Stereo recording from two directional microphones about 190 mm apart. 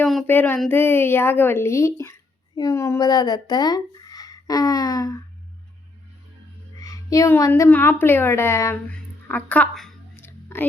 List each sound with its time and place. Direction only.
0.0 s a woman's voice: centre (ahead or behind); by 5.2 s 20° left (ahead or behind)
6.8 s a woman's voice: 15° left (ahead or behind)
9.2 s a sound: 10° left (ahead or behind)
10.2 s whispering: 10° left (ahead or behind)